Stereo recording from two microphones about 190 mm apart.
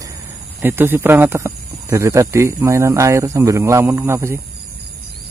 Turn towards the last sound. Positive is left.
turn(degrees=-15)  # may be behind; listen again after turning